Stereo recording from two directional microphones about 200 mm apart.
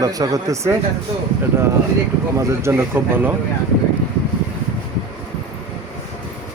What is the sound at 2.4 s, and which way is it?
Speech, 15° right (ahead or behind).